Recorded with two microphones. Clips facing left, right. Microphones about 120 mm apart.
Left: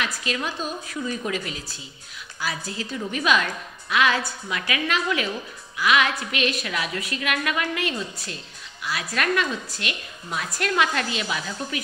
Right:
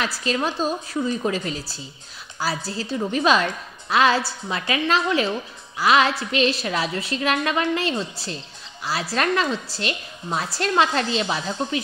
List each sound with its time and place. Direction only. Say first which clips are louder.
0.0 s a woman's voice: right 4 dB; 35° right (ahead or behind)